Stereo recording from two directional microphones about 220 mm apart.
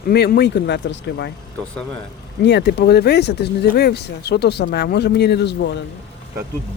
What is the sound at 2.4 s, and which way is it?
Speech, 50° left (ahead or behind).